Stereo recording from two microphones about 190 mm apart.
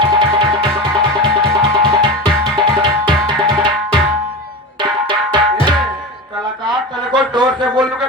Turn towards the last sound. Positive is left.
turn(degrees=-25)  # may be behind; listen again after turning